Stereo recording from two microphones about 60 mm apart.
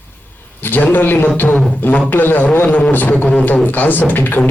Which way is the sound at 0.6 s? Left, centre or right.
Left.